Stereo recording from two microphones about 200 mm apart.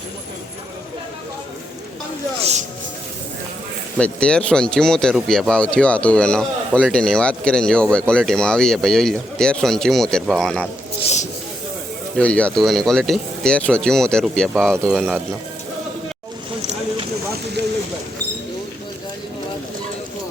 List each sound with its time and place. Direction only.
2.4 s a sound: 35° right (ahead or behind)
3.9 s speech: 5° left (ahead or behind)
12.1 s speech: 5° left (ahead or behind)